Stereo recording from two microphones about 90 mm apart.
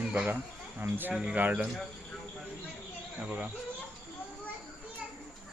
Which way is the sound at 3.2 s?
10° right (ahead or behind).